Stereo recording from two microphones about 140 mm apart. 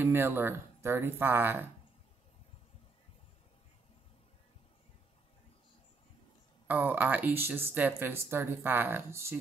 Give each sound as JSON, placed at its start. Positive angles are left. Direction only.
{"t": 0.0, "sound": "speech", "side_deg": -15}
{"t": 6.7, "sound": "speech", "side_deg": -15}